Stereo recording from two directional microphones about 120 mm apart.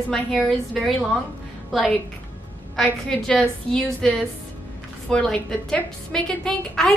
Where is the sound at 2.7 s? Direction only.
5° left (ahead or behind).